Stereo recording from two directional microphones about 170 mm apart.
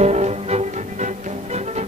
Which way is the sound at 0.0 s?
40° right (ahead or behind).